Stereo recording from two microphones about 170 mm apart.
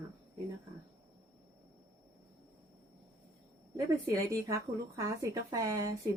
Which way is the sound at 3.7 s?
20° right (ahead or behind).